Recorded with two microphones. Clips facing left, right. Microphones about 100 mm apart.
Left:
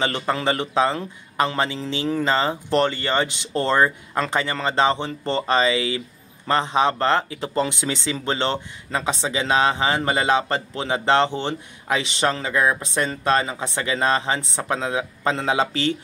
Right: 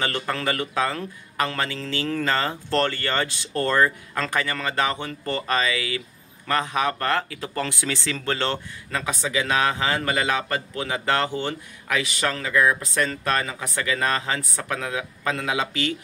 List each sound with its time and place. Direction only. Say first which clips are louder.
0.0 s a man's voice: left 3 dB; 20° left (ahead or behind)